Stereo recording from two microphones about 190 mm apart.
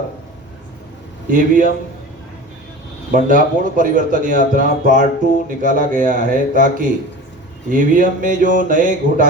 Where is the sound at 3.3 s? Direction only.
45° right (ahead or behind).